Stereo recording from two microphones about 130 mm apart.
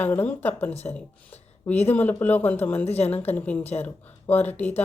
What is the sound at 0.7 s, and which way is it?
Speech, 55° left (ahead or behind).